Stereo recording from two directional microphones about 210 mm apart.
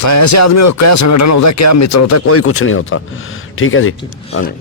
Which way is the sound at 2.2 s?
90° left.